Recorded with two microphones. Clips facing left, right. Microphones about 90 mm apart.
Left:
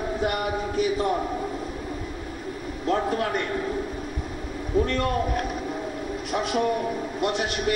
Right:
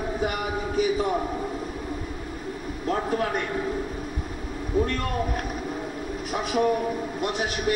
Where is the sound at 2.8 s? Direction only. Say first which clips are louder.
Left 1 dB; 5° right (ahead or behind).